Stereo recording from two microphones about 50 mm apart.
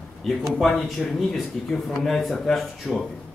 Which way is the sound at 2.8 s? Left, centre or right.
Left.